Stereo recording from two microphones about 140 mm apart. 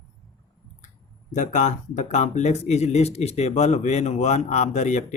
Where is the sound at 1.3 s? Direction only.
60° left (ahead or behind).